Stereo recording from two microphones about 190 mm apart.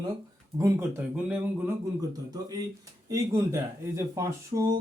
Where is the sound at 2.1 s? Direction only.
20° right (ahead or behind).